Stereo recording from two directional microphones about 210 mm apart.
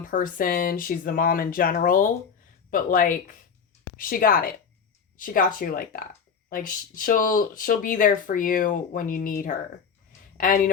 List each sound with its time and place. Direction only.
0.0 s a woman's voice: 40° left (ahead or behind)